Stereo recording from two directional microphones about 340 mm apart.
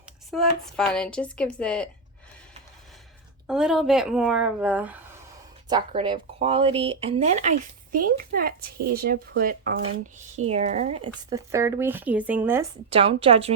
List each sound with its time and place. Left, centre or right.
0.3 s speech: centre
3.4 s speech: centre
12.9 s speech: centre